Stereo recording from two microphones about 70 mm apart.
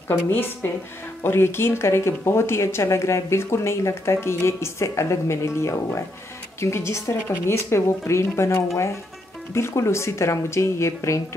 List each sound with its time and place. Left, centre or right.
0.3 s a woman's voice: left